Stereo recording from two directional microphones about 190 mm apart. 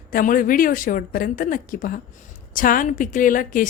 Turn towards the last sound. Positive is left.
turn(degrees=45)  # may be behind; listen again after turning